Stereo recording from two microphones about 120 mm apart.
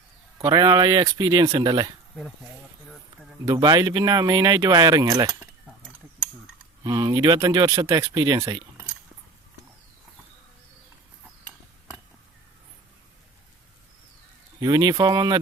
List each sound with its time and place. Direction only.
0.4 s speech: 35° right (ahead or behind)
2.9 s a sound: centre (ahead or behind)
3.4 s speech: 30° right (ahead or behind)
6.8 s speech: 35° right (ahead or behind)
14.6 s speech: 35° right (ahead or behind)